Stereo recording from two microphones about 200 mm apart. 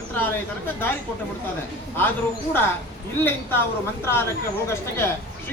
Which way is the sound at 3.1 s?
10° left (ahead or behind).